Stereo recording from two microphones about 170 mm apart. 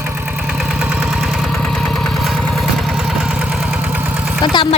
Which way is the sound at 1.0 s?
Centre (ahead or behind).